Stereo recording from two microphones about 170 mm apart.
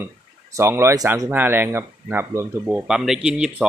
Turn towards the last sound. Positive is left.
turn(degrees=-5)  # may be behind; listen again after turning